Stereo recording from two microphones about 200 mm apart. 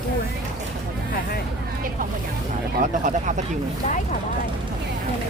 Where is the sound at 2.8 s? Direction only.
40° right (ahead or behind).